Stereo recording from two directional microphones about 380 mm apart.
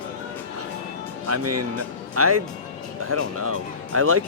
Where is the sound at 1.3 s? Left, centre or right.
Right.